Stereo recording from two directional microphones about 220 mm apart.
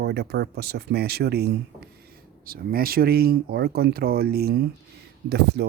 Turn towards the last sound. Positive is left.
turn(degrees=-50)  # may be behind; listen again after turning